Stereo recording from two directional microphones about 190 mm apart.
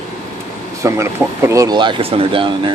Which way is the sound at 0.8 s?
15° right (ahead or behind).